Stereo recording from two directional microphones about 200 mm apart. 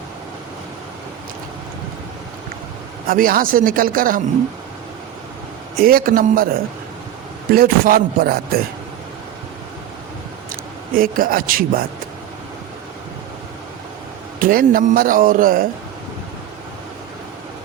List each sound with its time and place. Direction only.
3.1 s a man's voice: 45° right (ahead or behind)
5.7 s a man's voice: 45° right (ahead or behind)
10.9 s a man's voice: 45° right (ahead or behind)
14.3 s a man's voice: 45° right (ahead or behind)